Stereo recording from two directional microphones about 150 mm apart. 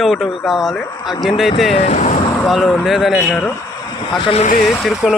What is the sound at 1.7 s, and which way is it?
Speech, 50° left (ahead or behind).